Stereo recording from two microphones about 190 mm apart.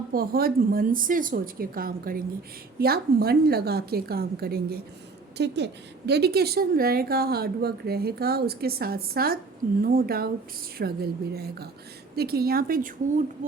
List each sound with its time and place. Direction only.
0.1 s a woman's voice: 50° right (ahead or behind)